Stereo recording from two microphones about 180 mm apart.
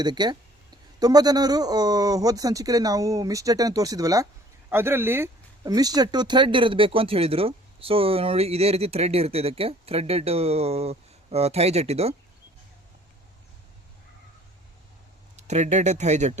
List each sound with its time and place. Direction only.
0.0 s speech: 25° right (ahead or behind)
15.4 s speech: 40° right (ahead or behind)